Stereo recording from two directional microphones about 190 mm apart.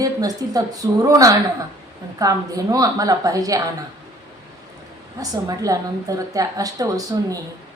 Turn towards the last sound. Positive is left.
turn(degrees=-20)  # may be behind; listen again after turning